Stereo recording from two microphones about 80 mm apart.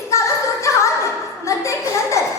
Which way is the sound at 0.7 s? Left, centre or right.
Left.